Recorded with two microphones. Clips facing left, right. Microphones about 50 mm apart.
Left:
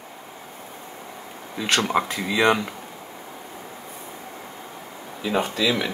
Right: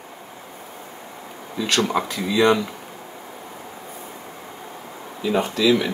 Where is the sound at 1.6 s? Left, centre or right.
Left.